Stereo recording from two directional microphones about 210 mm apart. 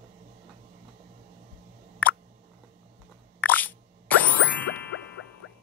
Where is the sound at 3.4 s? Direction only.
10° left (ahead or behind).